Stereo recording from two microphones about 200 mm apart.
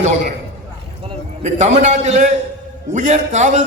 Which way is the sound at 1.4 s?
35° right (ahead or behind).